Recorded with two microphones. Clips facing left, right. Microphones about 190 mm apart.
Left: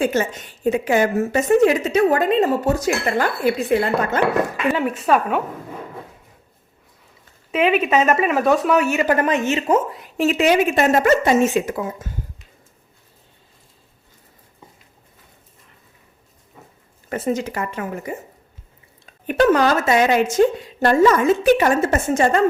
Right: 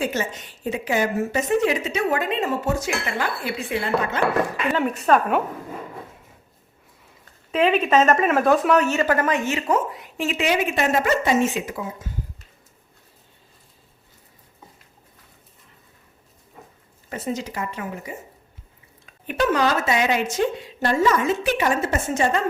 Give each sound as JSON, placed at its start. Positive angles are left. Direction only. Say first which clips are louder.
{"t": 0.0, "sound": "a woman's voice", "louder": "left 5 dB", "side_deg": 50}
{"t": 4.7, "sound": "speech", "louder": "right 1 dB", "side_deg": 0}
{"t": 7.5, "sound": "speech", "louder": "left 1 dB", "side_deg": 5}
{"t": 10.2, "sound": "a woman's voice", "louder": "left 6 dB", "side_deg": 40}
{"t": 17.1, "sound": "a woman's voice", "louder": "left 6 dB", "side_deg": 50}
{"t": 19.3, "sound": "a woman's voice", "louder": "left 5 dB", "side_deg": 45}